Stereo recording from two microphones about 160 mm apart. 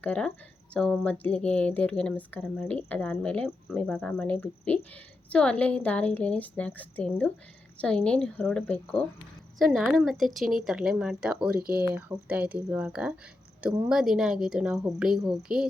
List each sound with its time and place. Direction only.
0.0 s speech: 10° left (ahead or behind)
9.6 s speech: centre (ahead or behind)
11.5 s speech: 70° right (ahead or behind)
11.9 s speech: 10° right (ahead or behind)